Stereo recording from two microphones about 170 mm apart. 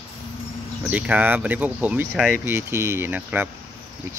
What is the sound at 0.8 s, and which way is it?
Speech, 10° right (ahead or behind).